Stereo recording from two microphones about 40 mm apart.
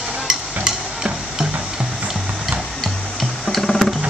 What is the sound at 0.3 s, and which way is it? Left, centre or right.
Stir, centre.